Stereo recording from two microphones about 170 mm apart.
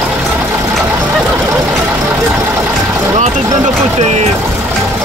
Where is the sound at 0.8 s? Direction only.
10° right (ahead or behind).